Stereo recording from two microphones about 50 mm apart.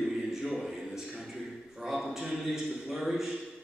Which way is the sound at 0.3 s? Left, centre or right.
Centre.